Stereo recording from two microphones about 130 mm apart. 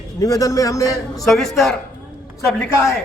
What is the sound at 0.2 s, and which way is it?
A man's voice, 25° left (ahead or behind).